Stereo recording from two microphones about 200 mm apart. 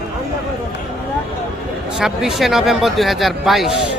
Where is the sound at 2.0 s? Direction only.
Centre (ahead or behind).